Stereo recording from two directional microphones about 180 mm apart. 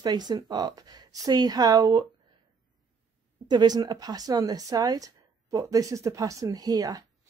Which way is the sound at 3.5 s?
25° right (ahead or behind).